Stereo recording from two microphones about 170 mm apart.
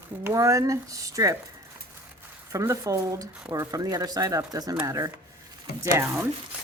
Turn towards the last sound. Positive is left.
turn(degrees=-15)  # may be behind; listen again after turning